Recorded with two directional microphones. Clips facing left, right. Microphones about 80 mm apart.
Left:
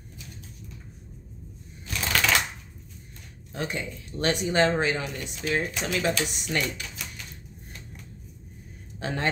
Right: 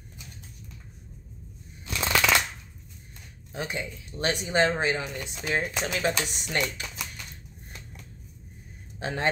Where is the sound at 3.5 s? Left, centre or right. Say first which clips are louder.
Left 1 dB; centre.